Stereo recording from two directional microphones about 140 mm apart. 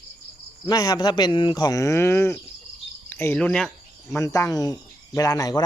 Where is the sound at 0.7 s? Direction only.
25° left (ahead or behind); by 3.6 s 10° left (ahead or behind).